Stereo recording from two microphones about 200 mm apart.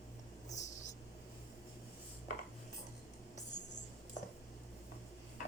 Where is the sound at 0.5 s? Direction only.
35° left (ahead or behind).